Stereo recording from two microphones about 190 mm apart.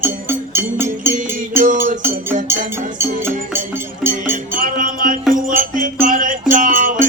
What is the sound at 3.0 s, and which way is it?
Music, 10° right (ahead or behind).